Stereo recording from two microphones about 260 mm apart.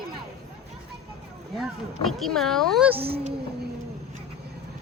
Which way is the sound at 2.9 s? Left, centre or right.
Right.